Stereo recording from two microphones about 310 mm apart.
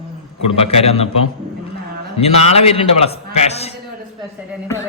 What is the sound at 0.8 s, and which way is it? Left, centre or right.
Speech, centre.